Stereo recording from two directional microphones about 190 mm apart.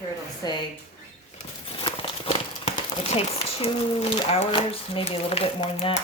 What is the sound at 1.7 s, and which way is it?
Crumpling, 25° left (ahead or behind).